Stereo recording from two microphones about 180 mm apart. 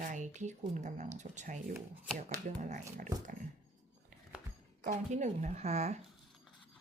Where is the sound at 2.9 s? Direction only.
50° right (ahead or behind).